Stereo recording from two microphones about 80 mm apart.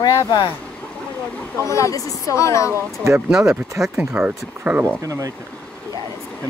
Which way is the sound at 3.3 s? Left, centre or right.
Centre.